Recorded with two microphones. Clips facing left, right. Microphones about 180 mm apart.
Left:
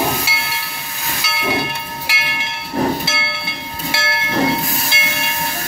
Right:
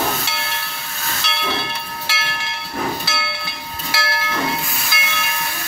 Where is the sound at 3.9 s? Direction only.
25° left (ahead or behind).